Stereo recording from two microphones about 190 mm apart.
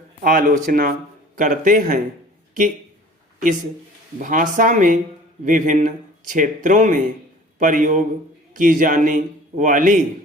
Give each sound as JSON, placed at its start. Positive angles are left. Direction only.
{"t": 0.2, "sound": "a man's voice", "side_deg": -45}
{"t": 4.2, "sound": "a man's voice", "side_deg": -45}